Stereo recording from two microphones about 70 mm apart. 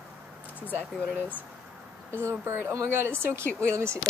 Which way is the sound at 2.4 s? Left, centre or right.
Right.